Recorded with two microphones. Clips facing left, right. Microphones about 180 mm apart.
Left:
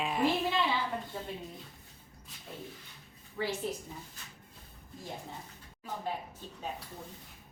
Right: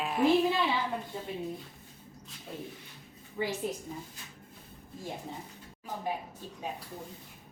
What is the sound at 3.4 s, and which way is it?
Speech, 20° right (ahead or behind).